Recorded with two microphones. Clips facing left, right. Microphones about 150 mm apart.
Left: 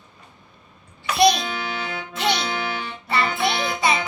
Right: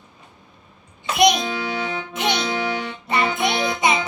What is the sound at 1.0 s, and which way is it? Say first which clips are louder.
Music: even; 20° right (ahead or behind).